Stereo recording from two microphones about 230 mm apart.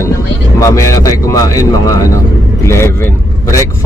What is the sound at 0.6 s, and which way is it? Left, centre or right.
Speech, centre.